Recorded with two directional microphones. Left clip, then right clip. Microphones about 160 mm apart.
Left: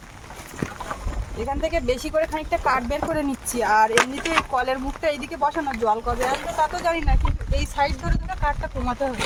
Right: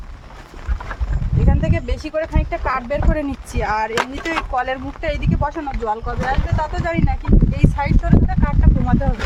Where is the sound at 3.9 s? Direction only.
35° right (ahead or behind).